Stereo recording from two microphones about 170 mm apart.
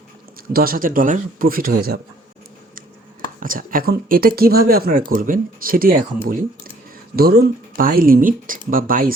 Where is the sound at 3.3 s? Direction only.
55° right (ahead or behind).